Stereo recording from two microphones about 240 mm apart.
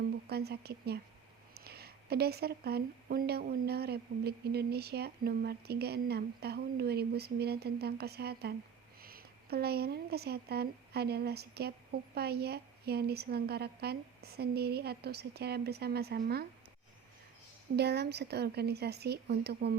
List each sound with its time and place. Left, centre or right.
0.3 s speech: right
17.7 s speech: right